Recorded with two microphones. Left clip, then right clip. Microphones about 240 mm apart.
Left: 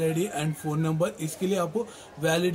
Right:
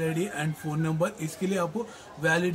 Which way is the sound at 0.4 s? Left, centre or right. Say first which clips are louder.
Left 2 dB; centre.